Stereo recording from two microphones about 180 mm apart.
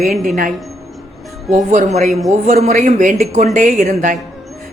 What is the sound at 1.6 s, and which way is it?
Speech, 45° right (ahead or behind).